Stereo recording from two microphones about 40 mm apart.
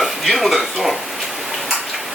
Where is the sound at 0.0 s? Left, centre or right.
Centre.